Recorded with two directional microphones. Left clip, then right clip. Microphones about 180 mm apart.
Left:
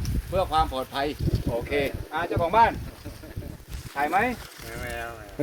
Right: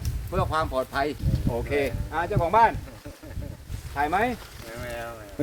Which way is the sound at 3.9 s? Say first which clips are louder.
Even; 20° right (ahead or behind).